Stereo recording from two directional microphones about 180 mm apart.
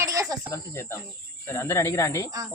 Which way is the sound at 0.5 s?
15° left (ahead or behind).